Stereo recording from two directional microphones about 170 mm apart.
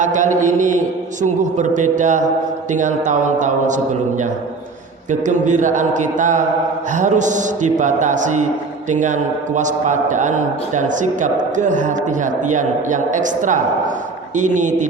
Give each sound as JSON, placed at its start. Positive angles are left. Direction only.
{"t": 0.0, "sound": "a man's voice", "side_deg": -50}
{"t": 5.2, "sound": "a man's voice", "side_deg": -45}